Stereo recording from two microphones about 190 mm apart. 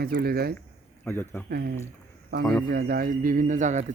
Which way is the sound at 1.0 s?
15° left (ahead or behind).